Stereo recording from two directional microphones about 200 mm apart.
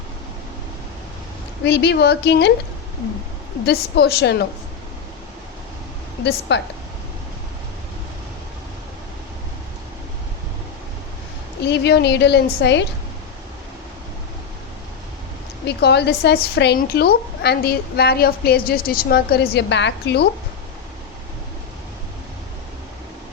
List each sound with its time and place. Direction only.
1.6 s a woman's voice: 55° left (ahead or behind)
3.7 s a woman's voice: 55° left (ahead or behind)
6.5 s a woman's voice: 60° left (ahead or behind)
11.6 s a woman's voice: 60° left (ahead or behind)
15.6 s a woman's voice: 55° left (ahead or behind)